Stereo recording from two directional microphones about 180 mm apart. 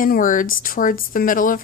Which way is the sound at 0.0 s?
50° left (ahead or behind).